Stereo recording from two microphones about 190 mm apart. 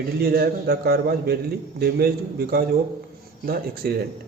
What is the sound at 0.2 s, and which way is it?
A man's voice, 55° right (ahead or behind).